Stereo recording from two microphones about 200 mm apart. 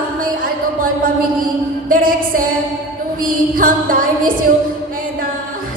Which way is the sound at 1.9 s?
45° right (ahead or behind).